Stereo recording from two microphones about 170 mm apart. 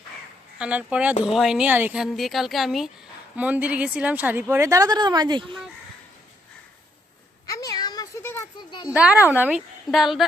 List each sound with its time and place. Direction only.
0.6 s a woman's voice: 5° right (ahead or behind); by 5.5 s 25° right (ahead or behind)
7.4 s a sound: 20° left (ahead or behind)
8.9 s a woman's voice: 10° right (ahead or behind)